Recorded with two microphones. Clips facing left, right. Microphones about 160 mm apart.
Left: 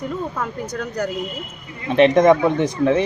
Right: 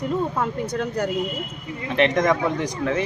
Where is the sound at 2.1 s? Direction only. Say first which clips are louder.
Left 7 dB; 30° left (ahead or behind).